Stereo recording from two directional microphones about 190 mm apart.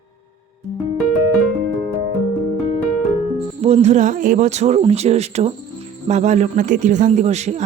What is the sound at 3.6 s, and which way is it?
A man's voice, 35° right (ahead or behind).